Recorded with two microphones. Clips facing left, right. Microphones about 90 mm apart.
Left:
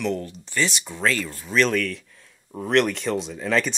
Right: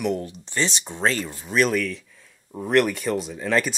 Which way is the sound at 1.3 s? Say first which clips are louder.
Even; 15° right (ahead or behind).